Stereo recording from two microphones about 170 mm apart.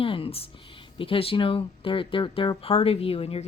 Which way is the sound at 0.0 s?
35° left (ahead or behind).